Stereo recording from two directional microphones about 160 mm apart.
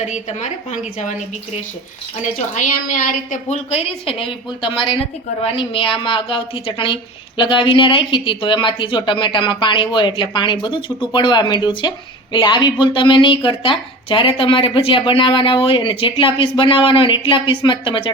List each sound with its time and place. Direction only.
2.6 s a woman's voice: 55° left (ahead or behind)
3.5 s a woman's voice: 40° left (ahead or behind)